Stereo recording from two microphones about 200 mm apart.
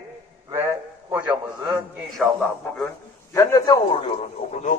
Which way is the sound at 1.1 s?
5° right (ahead or behind).